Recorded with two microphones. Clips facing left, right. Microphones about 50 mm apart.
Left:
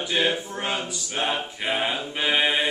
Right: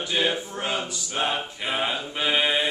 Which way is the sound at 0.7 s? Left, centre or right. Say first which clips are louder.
Even; centre.